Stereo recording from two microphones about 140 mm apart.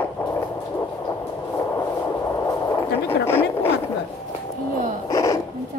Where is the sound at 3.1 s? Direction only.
15° left (ahead or behind).